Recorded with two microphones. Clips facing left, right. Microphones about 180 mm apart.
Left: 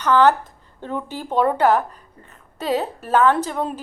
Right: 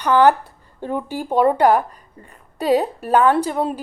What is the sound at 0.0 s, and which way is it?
A woman's voice, 10° right (ahead or behind).